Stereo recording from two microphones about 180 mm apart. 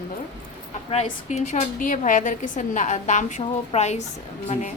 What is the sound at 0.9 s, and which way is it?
Speech, 35° left (ahead or behind).